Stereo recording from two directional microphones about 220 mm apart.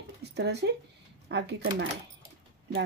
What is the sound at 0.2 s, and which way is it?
Speech, 50° right (ahead or behind).